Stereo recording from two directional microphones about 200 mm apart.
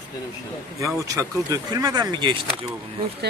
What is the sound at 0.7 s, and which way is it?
Speech, 15° right (ahead or behind).